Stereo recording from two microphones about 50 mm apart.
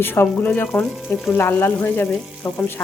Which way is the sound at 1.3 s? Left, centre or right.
Left.